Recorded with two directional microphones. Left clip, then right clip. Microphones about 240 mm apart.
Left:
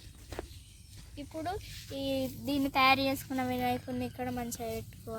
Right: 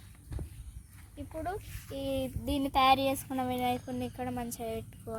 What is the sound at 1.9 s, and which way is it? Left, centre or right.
Speech, centre.